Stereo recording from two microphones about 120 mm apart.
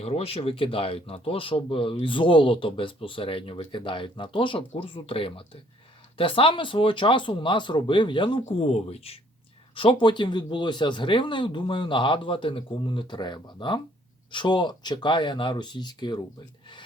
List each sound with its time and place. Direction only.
0.0 s speech: 55° left (ahead or behind)
8.4 s speech: 60° left (ahead or behind)
9.7 s speech: 45° left (ahead or behind)